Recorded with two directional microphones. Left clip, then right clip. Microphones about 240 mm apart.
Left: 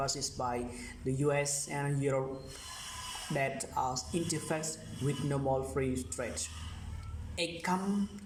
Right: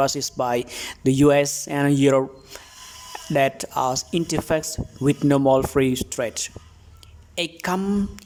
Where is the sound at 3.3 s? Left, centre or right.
Right.